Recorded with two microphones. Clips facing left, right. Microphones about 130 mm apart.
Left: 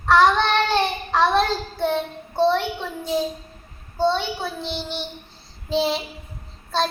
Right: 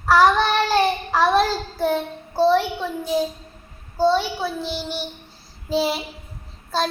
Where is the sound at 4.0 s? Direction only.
5° right (ahead or behind).